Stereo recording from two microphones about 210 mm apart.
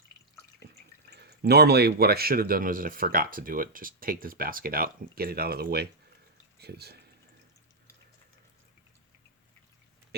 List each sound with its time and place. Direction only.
1.1 s speech: 50° right (ahead or behind)